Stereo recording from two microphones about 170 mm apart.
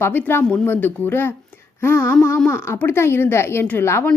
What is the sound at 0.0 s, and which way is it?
A woman's voice, 10° left (ahead or behind).